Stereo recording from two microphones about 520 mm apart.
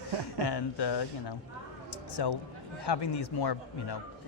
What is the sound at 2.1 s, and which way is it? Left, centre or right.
A man's voice, left.